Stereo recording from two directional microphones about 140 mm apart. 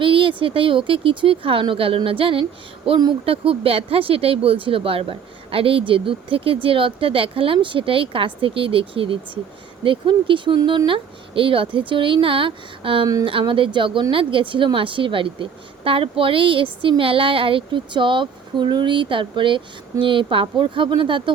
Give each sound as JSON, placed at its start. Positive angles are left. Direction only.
{"t": 0.0, "sound": "speech", "side_deg": -40}